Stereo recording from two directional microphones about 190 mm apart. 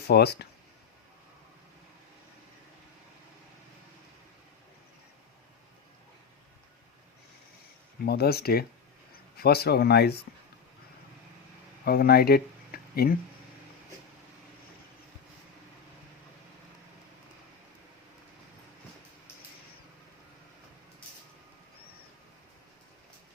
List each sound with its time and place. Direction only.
0.1 s speech: 60° left (ahead or behind)
8.0 s speech: 55° left (ahead or behind)
11.9 s speech: 55° left (ahead or behind)